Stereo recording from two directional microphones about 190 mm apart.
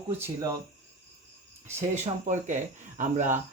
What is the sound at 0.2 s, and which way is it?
Speech, 15° right (ahead or behind).